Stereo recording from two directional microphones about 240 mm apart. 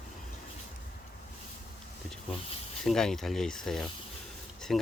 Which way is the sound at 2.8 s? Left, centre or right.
Centre.